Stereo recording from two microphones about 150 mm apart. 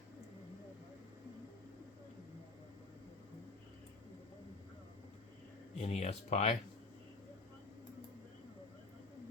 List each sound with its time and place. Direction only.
5.7 s speech: 45° left (ahead or behind)